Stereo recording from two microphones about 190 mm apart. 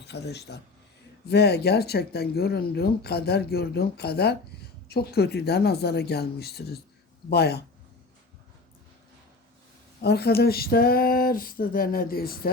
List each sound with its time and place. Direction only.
0.0 s speech: 65° left (ahead or behind)
10.0 s speech: 60° left (ahead or behind)